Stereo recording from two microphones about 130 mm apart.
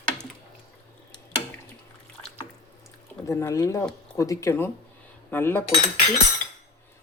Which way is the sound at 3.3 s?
20° left (ahead or behind).